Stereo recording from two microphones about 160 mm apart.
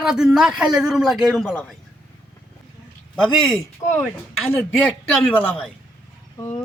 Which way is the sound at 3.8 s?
20° left (ahead or behind).